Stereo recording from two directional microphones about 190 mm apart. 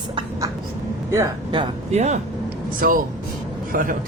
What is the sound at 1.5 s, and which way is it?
Speech, 30° right (ahead or behind).